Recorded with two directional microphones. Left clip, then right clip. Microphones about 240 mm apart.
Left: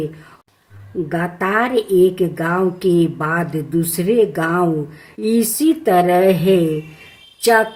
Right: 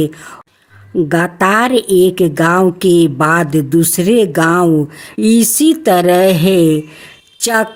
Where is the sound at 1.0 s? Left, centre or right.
Right.